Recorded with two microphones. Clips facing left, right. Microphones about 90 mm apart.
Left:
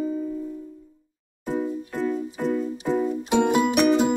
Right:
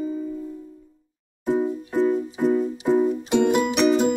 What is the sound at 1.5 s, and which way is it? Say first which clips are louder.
Music: right 4 dB; 20° right (ahead or behind).